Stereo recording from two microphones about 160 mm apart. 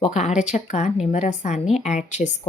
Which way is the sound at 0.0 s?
45° left (ahead or behind).